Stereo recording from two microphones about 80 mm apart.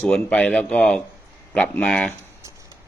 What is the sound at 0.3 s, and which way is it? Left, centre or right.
Speech, centre.